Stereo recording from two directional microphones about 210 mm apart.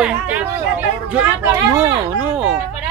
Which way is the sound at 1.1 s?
10° right (ahead or behind).